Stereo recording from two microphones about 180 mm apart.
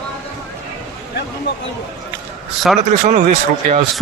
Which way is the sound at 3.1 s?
40° right (ahead or behind).